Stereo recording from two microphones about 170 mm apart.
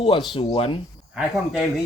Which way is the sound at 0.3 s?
30° left (ahead or behind).